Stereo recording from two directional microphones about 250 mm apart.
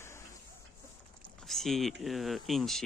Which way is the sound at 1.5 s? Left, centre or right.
Centre.